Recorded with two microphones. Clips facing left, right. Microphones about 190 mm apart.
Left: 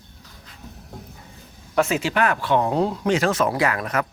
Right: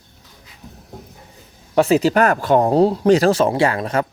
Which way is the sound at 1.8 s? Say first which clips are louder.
Right 6 dB; 35° right (ahead or behind).